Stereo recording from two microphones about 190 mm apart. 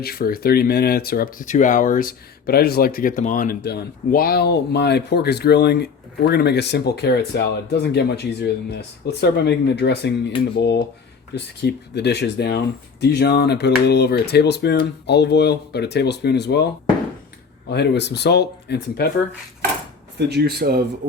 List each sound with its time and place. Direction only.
0.0 s speech: 50° left (ahead or behind)
17.7 s speech: 65° left (ahead or behind)
20.1 s speech: 60° right (ahead or behind)